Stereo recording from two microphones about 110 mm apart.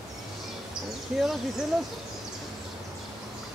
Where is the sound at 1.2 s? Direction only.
5° right (ahead or behind).